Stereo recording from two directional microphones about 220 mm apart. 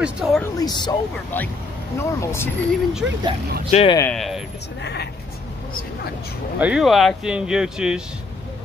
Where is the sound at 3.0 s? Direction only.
5° right (ahead or behind).